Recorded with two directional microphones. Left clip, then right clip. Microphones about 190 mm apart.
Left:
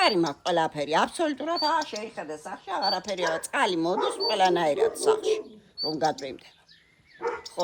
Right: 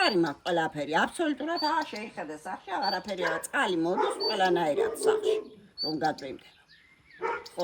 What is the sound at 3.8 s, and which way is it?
Speech, 35° left (ahead or behind).